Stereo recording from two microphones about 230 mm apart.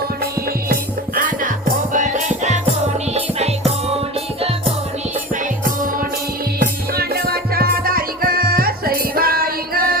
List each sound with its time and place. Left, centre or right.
0.7 s music: right
6.6 s music: right